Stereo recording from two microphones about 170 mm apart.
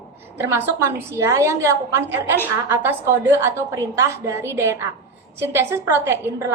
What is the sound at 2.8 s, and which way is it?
A woman's voice, 10° right (ahead or behind).